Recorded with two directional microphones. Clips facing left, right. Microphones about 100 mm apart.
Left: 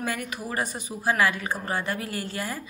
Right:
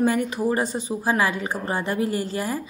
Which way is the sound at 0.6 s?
15° left (ahead or behind).